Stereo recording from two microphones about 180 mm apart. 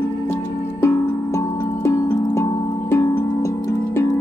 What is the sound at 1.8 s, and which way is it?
Music, 15° left (ahead or behind).